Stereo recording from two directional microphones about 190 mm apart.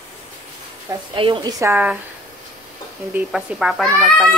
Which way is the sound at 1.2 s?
25° right (ahead or behind).